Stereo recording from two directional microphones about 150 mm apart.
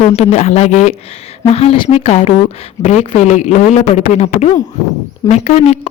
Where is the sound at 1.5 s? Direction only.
40° left (ahead or behind).